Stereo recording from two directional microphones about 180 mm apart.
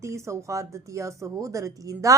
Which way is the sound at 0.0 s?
15° right (ahead or behind).